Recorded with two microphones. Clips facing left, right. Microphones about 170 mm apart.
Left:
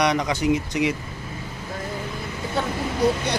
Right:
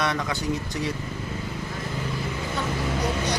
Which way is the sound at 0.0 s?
15° left (ahead or behind).